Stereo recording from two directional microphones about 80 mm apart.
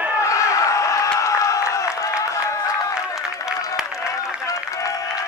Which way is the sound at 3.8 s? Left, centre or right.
Centre.